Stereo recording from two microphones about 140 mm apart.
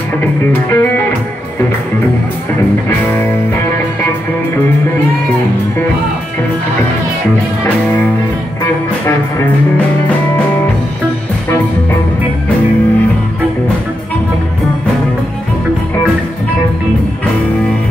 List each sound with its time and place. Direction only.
0.2 s music: 15° left (ahead or behind)